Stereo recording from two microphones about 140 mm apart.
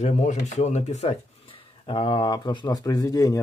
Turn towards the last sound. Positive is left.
turn(degrees=25)  # may be behind; listen again after turning